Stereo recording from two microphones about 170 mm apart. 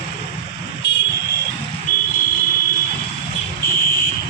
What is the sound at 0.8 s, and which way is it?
Vehicle, 90° left.